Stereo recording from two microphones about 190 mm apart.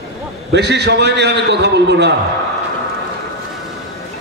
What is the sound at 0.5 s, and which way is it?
A man's voice, 65° right (ahead or behind).